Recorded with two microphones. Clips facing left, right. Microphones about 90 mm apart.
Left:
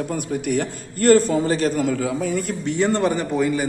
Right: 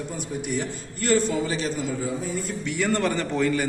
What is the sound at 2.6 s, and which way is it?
Speech, 35° left (ahead or behind).